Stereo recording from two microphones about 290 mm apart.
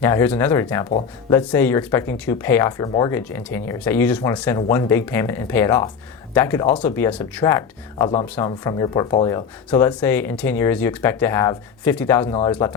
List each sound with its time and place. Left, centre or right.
0.0 s speech: centre